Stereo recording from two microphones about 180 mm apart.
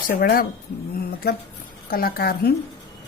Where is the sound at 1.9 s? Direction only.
55° left (ahead or behind).